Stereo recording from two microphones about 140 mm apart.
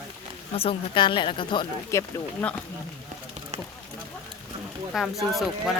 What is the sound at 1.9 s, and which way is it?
Speech, 20° left (ahead or behind).